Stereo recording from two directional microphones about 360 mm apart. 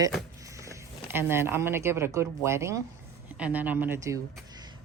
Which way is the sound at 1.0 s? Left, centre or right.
Centre.